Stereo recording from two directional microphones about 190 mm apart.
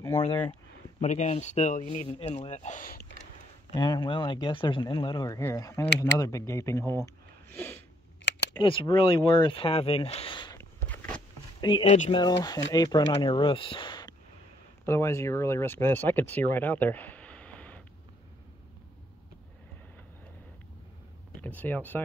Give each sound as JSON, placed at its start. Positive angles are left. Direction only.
{"t": 0.0, "sound": "speech", "side_deg": 15}
{"t": 1.0, "sound": "speech", "side_deg": 40}
{"t": 3.7, "sound": "speech", "side_deg": 20}
{"t": 8.2, "sound": "a sound", "side_deg": 70}
{"t": 8.5, "sound": "speech", "side_deg": 25}
{"t": 10.6, "sound": "a sound", "side_deg": 10}
{"t": 11.6, "sound": "speech", "side_deg": 25}
{"t": 21.4, "sound": "speech", "side_deg": 10}